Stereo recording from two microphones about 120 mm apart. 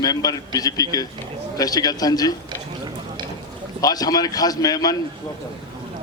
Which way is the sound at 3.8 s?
30° left (ahead or behind).